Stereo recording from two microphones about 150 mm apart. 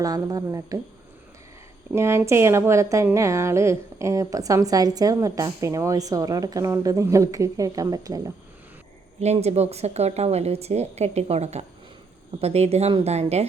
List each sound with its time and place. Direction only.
0.0 s a woman's voice: 25° right (ahead or behind)
1.9 s a woman's voice: 15° right (ahead or behind)
9.2 s a woman's voice: 45° right (ahead or behind)